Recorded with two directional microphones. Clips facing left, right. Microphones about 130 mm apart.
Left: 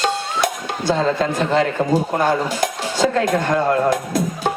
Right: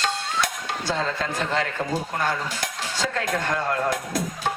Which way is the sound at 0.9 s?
20° left (ahead or behind).